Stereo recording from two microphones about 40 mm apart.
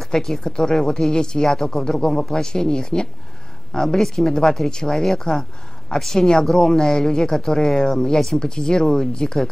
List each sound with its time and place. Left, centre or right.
0.0 s speech: centre